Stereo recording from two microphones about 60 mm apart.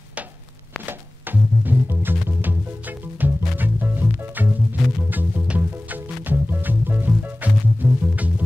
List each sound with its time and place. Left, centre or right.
0.8 s music: right
4.8 s music: centre
5.1 s music: right